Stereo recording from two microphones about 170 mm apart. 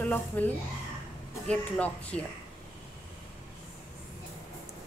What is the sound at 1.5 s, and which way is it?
Speech, 10° left (ahead or behind).